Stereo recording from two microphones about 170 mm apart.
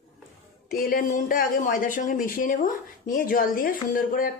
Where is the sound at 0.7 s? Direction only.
55° left (ahead or behind).